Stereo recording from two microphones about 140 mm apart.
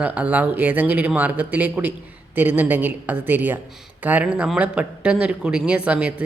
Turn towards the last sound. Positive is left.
turn(degrees=-10)  # may be behind; listen again after turning